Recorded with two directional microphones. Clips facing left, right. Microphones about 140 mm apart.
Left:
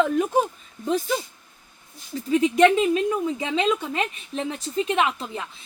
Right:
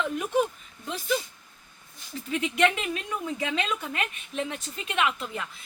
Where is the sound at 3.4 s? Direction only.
25° left (ahead or behind).